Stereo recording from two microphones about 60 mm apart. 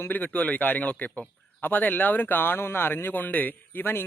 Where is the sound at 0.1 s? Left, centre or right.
Left.